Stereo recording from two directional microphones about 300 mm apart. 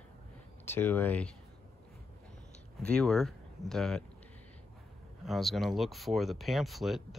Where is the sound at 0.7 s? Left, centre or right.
Centre.